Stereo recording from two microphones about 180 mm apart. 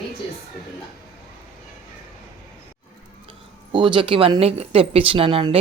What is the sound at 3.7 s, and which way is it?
Speech, 25° right (ahead or behind).